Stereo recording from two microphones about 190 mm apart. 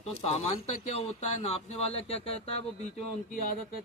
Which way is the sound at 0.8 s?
35° left (ahead or behind).